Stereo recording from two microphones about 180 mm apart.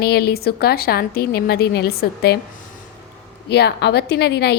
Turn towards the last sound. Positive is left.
turn(degrees=65)  # may be behind; listen again after turning